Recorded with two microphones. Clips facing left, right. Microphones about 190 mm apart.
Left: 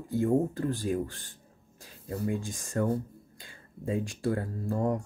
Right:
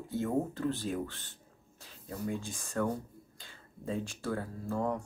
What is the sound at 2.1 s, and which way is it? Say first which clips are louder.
Speech: left 5 dB; 55° left (ahead or behind).